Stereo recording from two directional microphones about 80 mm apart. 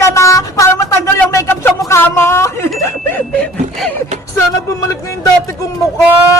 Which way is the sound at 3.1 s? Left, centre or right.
Left.